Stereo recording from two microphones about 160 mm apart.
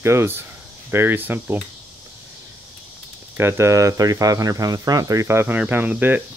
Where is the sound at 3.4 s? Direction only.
15° right (ahead or behind).